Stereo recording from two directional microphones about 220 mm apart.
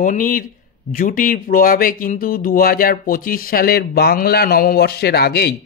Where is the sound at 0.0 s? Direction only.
35° left (ahead or behind).